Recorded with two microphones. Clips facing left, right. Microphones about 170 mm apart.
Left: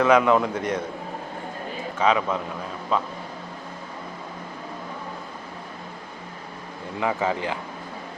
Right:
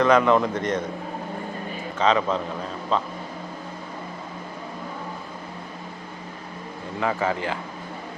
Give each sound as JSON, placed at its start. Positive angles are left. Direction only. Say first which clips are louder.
{"t": 0.0, "sound": "a man's voice", "louder": "even", "side_deg": 5}
{"t": 2.0, "sound": "a man's voice", "louder": "right 1 dB", "side_deg": 10}
{"t": 7.0, "sound": "a man's voice", "louder": "even", "side_deg": 15}